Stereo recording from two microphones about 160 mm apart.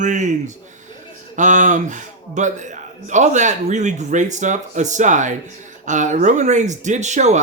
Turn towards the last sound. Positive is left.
turn(degrees=-45)  # may be behind; listen again after turning